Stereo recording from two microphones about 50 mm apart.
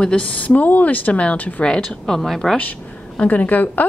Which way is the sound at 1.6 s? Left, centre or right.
Centre.